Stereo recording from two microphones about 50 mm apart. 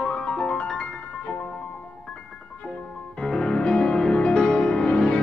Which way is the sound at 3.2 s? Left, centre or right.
Centre.